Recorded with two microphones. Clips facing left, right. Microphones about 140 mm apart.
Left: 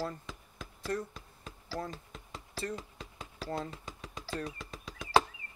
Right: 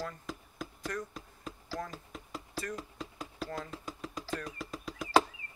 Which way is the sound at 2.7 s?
Centre (ahead or behind).